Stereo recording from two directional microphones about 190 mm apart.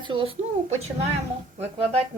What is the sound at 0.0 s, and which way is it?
Speech, 25° right (ahead or behind).